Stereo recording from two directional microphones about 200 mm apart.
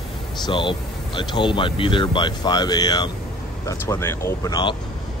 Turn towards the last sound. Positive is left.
turn(degrees=20)  # may be behind; listen again after turning